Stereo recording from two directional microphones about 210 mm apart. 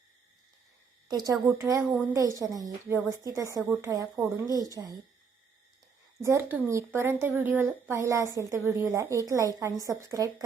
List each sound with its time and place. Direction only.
1.1 s speech: 15° right (ahead or behind)
6.2 s speech: 15° right (ahead or behind)